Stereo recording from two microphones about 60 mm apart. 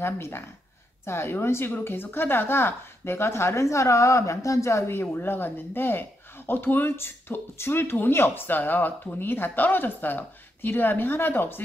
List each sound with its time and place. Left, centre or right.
0.0 s a woman's voice: left